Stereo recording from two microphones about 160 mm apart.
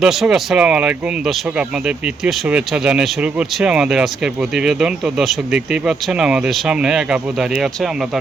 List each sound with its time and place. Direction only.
0.0 s speech: 5° right (ahead or behind)
2.2 s speech: 5° right (ahead or behind)